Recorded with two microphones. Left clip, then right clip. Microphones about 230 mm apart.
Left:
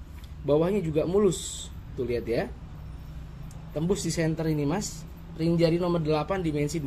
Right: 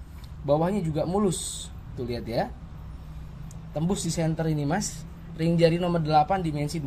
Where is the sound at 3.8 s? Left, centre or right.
Centre.